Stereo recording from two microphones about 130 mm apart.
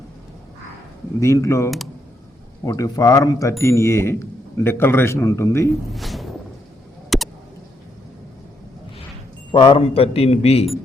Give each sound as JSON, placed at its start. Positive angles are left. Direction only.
{"t": 1.2, "sound": "speech", "side_deg": 25}
{"t": 5.9, "sound": "a sound", "side_deg": 0}
{"t": 9.5, "sound": "a man's voice", "side_deg": 40}